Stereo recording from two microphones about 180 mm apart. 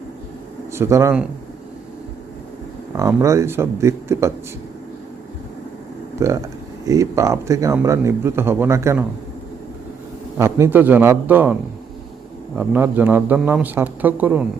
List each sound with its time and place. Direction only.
0.7 s speech: 15° right (ahead or behind)
2.9 s speech: 15° right (ahead or behind)
6.1 s speech: 15° right (ahead or behind)
10.3 s speech: 15° right (ahead or behind)
12.5 s speech: 10° right (ahead or behind)